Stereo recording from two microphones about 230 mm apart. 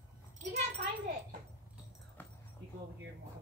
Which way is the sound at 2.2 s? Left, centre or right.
Centre.